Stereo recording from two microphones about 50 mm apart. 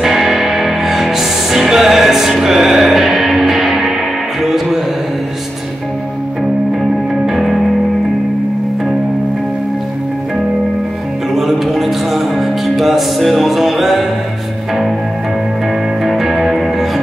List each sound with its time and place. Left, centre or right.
0.0 s music: centre
7.2 s music: centre
11.3 s music: centre
16.0 s music: centre